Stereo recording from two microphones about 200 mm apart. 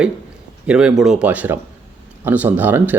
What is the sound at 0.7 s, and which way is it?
Speech, 5° right (ahead or behind).